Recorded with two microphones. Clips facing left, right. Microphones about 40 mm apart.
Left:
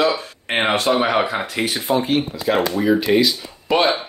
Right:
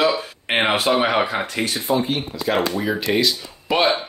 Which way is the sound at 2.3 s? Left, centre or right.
Centre.